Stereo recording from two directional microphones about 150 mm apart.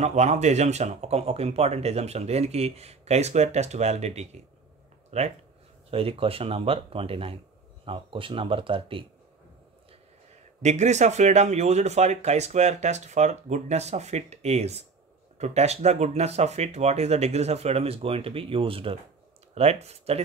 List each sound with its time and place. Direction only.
0.0 s speech: 50° right (ahead or behind)
10.6 s speech: 50° right (ahead or behind)